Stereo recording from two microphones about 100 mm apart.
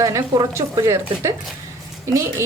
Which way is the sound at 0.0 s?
35° right (ahead or behind).